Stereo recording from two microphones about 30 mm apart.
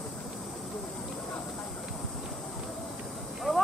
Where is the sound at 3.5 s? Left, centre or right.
Right.